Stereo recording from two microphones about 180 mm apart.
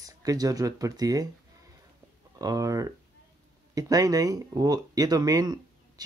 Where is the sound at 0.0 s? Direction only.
20° right (ahead or behind).